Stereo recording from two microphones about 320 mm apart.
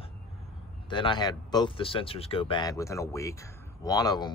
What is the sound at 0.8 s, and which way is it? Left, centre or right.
Speech, centre.